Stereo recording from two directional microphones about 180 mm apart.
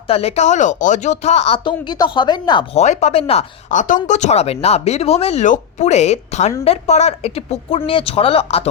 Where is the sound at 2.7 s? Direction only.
40° left (ahead or behind).